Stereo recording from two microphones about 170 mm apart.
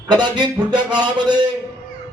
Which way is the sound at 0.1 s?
25° right (ahead or behind).